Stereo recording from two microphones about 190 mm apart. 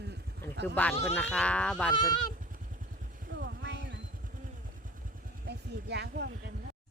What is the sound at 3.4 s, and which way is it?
Music, 70° right (ahead or behind).